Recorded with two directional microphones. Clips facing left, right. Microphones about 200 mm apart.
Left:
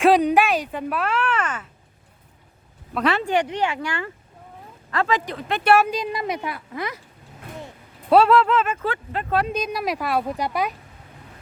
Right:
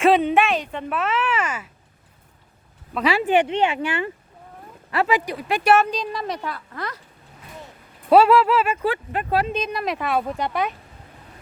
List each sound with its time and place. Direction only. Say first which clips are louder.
0.0 s speech: left 1 dB; centre (ahead or behind)
2.9 s speech: right 1 dB; 5° right (ahead or behind)
3.2 s speech: right 3 dB; 25° right (ahead or behind)
5.5 s speech: even; centre (ahead or behind)
8.1 s speech: right 1 dB; 5° right (ahead or behind)
9.6 s speech: even; 5° left (ahead or behind)